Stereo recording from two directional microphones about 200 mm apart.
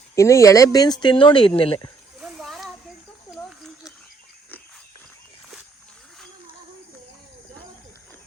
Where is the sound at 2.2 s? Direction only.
Centre (ahead or behind).